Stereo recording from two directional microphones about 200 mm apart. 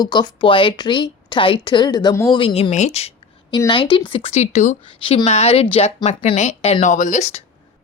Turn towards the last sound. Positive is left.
turn(degrees=35)  # may be behind; listen again after turning